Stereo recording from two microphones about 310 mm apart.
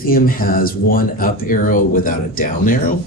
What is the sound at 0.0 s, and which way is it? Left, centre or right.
Speech, left.